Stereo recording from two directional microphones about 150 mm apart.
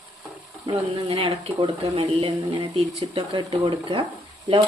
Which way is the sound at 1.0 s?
40° right (ahead or behind).